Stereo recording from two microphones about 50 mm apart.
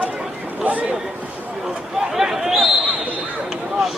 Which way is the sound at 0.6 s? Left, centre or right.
Right.